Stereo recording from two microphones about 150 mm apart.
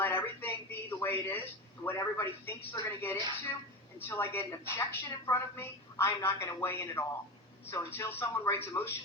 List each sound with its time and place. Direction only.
0.0 s a woman's voice: 15° left (ahead or behind)